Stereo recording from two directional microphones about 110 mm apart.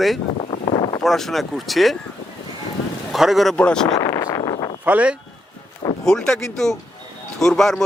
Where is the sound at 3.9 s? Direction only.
35° left (ahead or behind).